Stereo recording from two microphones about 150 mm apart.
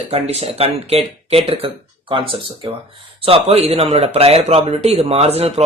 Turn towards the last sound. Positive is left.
turn(degrees=-45)  # may be behind; listen again after turning